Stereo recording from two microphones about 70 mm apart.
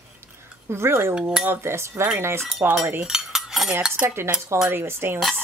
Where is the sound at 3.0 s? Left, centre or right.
Centre.